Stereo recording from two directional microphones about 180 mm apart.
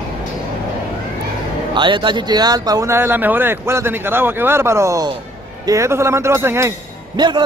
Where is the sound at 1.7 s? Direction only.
25° right (ahead or behind).